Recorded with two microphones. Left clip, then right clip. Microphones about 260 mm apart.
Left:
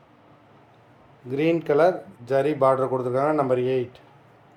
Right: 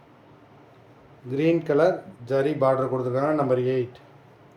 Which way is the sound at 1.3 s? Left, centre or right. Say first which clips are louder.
Even; centre.